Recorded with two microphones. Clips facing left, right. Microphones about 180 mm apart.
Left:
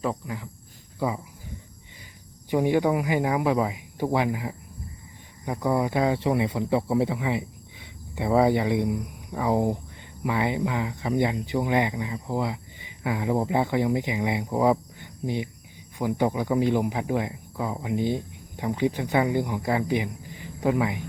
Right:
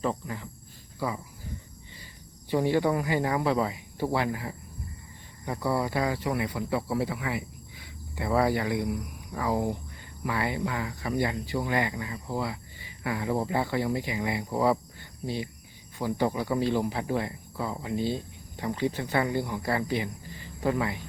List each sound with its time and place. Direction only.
0.0 s speech: 10° left (ahead or behind)
0.9 s speech: 20° left (ahead or behind)
2.5 s speech: 15° left (ahead or behind)